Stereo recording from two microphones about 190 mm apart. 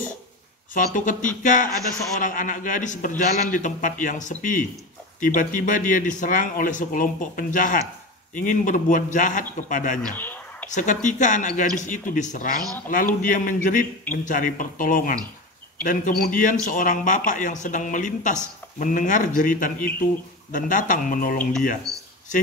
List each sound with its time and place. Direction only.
0.7 s speech: 45° left (ahead or behind)
10.1 s a sound: 10° left (ahead or behind)
10.7 s speech: 40° left (ahead or behind)